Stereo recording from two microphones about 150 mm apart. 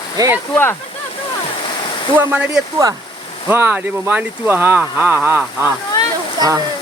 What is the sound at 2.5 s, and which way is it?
Speech, 25° right (ahead or behind).